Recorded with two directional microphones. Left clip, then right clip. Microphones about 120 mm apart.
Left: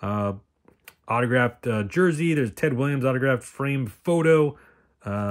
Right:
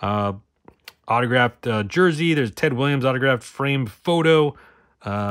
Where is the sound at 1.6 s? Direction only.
30° right (ahead or behind).